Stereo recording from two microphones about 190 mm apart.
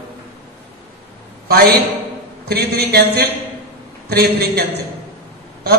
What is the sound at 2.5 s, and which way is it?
A man's voice, 55° right (ahead or behind).